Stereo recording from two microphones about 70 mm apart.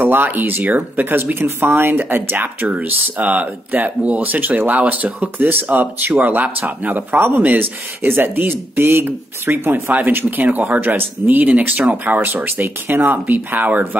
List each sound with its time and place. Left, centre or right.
0.0 s speech: right